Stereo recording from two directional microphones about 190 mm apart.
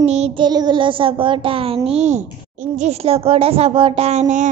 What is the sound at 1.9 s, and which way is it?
Child singing, 35° right (ahead or behind).